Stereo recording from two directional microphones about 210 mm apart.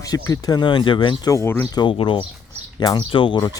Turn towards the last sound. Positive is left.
turn(degrees=20)  # may be behind; listen again after turning